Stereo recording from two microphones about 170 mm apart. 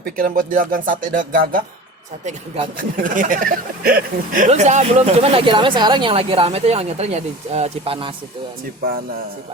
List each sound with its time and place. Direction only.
0.0 s speech: 55° right (ahead or behind)
2.7 s speech: 50° right (ahead or behind); by 8.1 s 30° right (ahead or behind)